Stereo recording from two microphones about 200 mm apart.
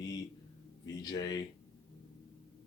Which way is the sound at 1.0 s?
20° left (ahead or behind).